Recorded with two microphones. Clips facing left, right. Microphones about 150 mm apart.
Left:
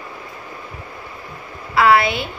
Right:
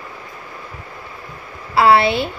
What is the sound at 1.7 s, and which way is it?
Speech, 30° right (ahead or behind).